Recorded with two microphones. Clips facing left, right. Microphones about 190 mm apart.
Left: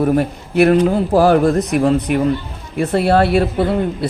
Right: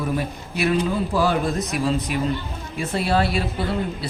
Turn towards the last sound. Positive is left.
turn(degrees=55)  # may be behind; listen again after turning